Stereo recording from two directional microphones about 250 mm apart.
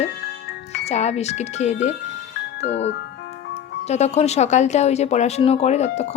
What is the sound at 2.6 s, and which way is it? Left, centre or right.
Speech, left.